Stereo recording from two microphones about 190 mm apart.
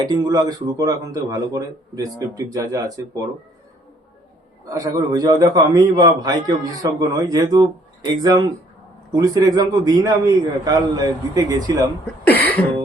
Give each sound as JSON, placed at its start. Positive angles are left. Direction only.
{"t": 0.0, "sound": "a man's voice", "side_deg": -20}
{"t": 4.8, "sound": "a man's voice", "side_deg": -20}
{"t": 12.2, "sound": "cough", "side_deg": 10}